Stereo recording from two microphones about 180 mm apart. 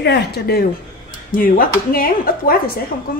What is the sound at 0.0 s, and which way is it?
Speech, 65° left (ahead or behind).